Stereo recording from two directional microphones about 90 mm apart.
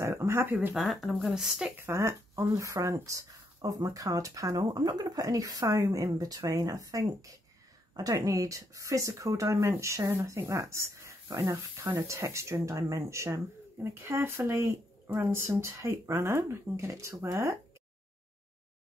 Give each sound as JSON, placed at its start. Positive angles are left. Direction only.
{"t": 0.0, "sound": "a sound", "side_deg": -30}
{"t": 0.7, "sound": "speech", "side_deg": 0}
{"t": 1.8, "sound": "speech", "side_deg": -30}